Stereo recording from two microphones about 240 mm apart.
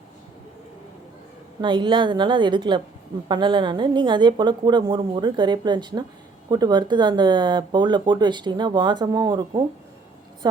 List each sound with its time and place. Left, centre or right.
1.6 s a woman's voice: centre